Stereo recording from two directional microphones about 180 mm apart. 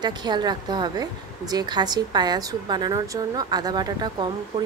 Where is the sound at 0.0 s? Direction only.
25° right (ahead or behind).